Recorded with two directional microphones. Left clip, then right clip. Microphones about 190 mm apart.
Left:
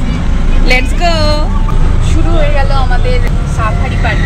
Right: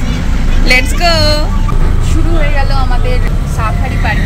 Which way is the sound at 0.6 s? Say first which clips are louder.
Right 2 dB; centre (ahead or behind).